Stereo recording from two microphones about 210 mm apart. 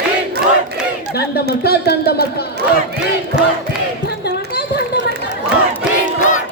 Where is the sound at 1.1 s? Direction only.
50° left (ahead or behind).